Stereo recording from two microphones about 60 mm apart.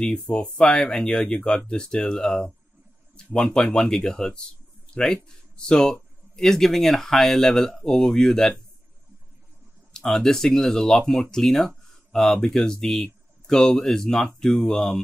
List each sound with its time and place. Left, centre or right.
0.0 s speech: centre
9.9 s speech: centre